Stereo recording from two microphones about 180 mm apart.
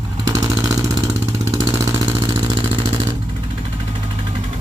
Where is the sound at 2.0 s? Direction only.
25° right (ahead or behind).